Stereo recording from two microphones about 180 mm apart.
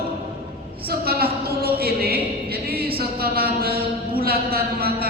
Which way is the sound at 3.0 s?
60° right (ahead or behind).